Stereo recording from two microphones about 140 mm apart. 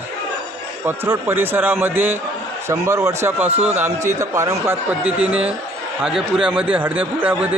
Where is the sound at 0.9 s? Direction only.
15° right (ahead or behind).